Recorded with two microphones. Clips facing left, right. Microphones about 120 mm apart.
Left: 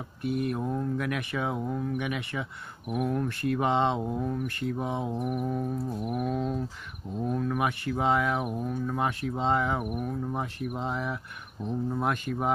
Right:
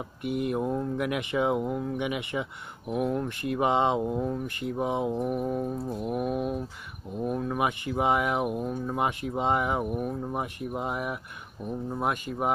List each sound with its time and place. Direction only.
0.2 s speech: 15° right (ahead or behind)
4.2 s speech: 20° right (ahead or behind)
5.2 s a sound: 25° right (ahead or behind)
7.2 s speech: 15° right (ahead or behind)